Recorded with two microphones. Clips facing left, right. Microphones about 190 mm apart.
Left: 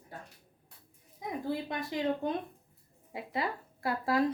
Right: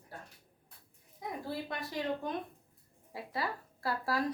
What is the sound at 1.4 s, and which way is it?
Speech, 20° left (ahead or behind).